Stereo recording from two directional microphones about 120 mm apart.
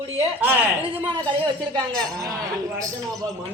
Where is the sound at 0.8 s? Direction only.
40° right (ahead or behind).